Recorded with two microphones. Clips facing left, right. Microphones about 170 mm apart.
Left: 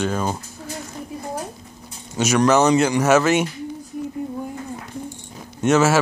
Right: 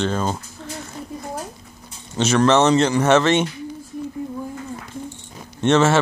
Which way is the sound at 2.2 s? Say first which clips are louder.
Even; 10° left (ahead or behind).